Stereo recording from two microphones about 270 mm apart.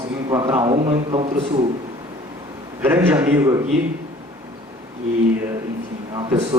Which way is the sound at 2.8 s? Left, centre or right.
Centre.